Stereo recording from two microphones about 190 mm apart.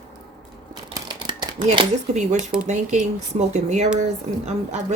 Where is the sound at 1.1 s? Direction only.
25° right (ahead or behind).